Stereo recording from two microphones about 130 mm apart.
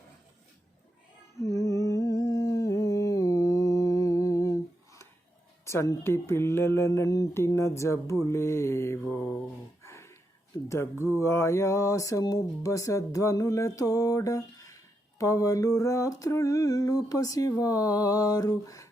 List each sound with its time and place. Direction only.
1.4 s humming: 25° left (ahead or behind)
5.6 s mantra: 25° left (ahead or behind)
9.8 s a sound: 20° left (ahead or behind)
10.7 s mantra: 20° left (ahead or behind)